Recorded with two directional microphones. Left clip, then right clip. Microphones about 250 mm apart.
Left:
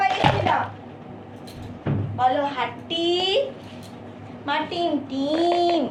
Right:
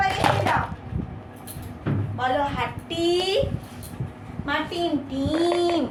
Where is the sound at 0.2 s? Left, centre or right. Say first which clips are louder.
Even; centre.